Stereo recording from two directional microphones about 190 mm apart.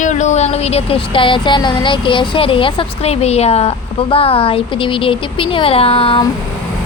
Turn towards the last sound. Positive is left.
turn(degrees=30)  # may be behind; listen again after turning